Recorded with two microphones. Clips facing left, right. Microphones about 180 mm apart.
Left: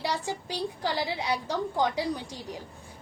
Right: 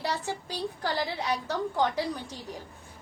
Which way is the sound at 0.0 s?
10° left (ahead or behind).